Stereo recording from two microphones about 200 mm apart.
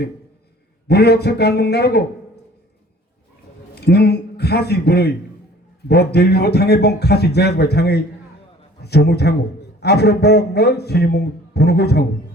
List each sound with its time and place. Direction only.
0.9 s speech: 55° left (ahead or behind)
3.8 s a man's voice: 55° left (ahead or behind)